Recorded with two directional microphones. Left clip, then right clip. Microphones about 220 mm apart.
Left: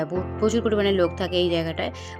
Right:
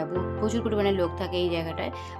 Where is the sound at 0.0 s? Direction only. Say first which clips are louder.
Left 4 dB; 15° left (ahead or behind).